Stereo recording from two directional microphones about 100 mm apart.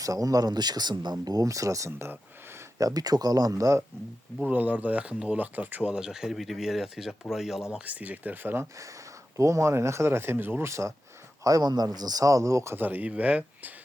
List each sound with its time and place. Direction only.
0.0 s speech: 35° right (ahead or behind)
4.4 s speech: 15° right (ahead or behind)
7.7 s speech: 15° right (ahead or behind)
9.4 s speech: 30° right (ahead or behind)
11.4 s speech: 40° right (ahead or behind); by 13.7 s 15° right (ahead or behind)